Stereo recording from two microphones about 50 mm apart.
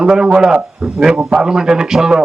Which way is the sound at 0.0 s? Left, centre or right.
Centre.